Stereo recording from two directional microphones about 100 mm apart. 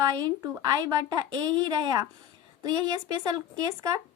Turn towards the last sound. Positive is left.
turn(degrees=-40)  # may be behind; listen again after turning